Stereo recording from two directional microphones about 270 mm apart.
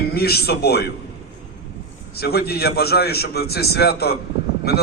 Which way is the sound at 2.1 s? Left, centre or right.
Left.